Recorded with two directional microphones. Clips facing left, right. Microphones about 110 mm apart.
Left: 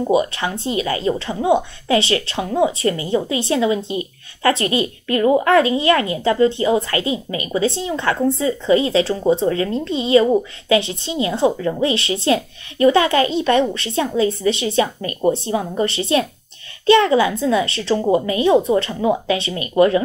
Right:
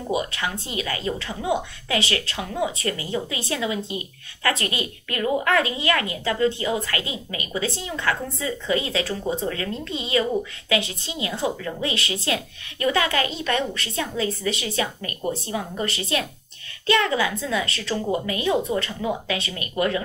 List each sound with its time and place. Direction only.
0.0 s speech: 30° left (ahead or behind)